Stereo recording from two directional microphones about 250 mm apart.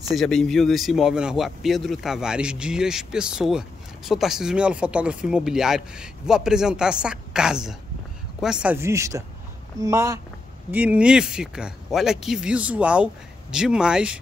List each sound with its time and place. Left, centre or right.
0.1 s speech: centre